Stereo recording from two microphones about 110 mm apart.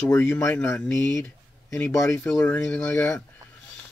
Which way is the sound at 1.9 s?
25° left (ahead or behind).